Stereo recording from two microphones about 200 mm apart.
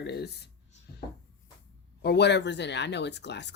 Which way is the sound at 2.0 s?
55° left (ahead or behind).